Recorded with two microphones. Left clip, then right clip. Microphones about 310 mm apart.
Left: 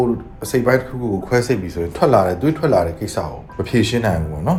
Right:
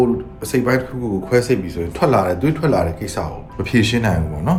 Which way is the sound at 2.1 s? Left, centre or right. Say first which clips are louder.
Left 2 dB; centre.